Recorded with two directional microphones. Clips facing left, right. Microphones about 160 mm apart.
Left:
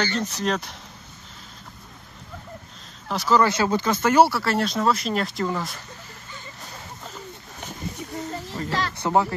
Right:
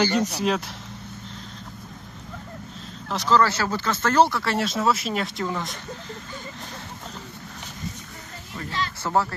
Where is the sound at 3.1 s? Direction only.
5° left (ahead or behind).